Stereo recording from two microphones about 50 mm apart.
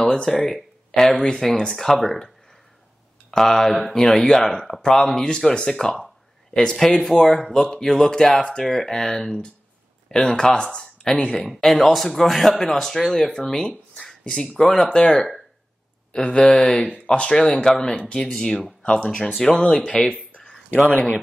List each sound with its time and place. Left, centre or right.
0.0 s speech: centre
0.3 s speech: centre
8.6 s speech: centre
11.3 s speech: centre; by 20.0 s left
20.1 s a sound: left